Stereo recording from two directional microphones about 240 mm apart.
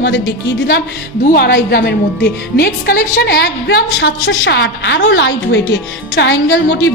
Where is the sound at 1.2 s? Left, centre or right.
Left.